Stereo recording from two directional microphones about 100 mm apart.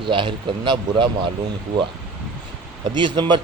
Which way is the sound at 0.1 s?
55° right (ahead or behind).